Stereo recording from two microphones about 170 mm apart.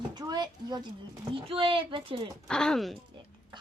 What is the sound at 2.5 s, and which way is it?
Speech, 5° left (ahead or behind).